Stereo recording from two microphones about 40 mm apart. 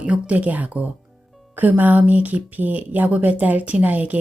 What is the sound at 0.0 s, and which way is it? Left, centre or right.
Speech, right.